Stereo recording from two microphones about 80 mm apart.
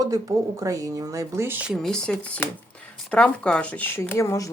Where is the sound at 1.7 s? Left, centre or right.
Centre.